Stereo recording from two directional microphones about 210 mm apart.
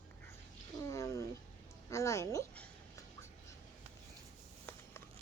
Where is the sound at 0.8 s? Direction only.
15° left (ahead or behind).